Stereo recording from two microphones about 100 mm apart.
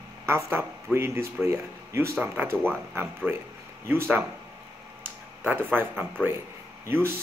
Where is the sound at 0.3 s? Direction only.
25° right (ahead or behind).